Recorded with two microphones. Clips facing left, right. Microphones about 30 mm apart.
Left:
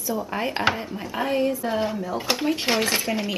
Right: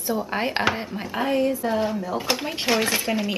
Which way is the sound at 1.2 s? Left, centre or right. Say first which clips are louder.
Right 1 dB; centre.